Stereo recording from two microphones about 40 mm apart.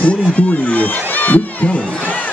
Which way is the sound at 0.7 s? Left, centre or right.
Left.